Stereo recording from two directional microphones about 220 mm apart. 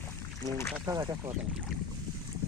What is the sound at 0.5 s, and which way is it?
Speech, 10° left (ahead or behind).